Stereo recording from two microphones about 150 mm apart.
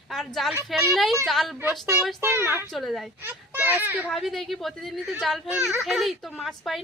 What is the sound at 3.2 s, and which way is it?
Speech, 10° right (ahead or behind).